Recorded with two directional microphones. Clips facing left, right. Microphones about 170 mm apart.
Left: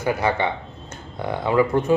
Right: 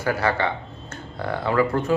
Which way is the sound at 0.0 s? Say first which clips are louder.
Left 1 dB; 20° left (ahead or behind).